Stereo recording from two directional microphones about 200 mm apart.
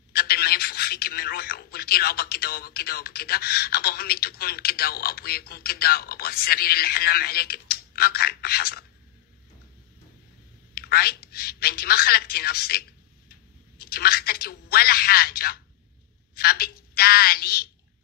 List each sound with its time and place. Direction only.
0.1 s speech: 50° left (ahead or behind)
10.7 s a woman's voice: 50° left (ahead or behind)